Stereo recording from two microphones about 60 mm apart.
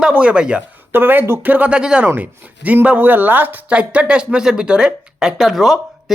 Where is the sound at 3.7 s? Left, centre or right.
Right.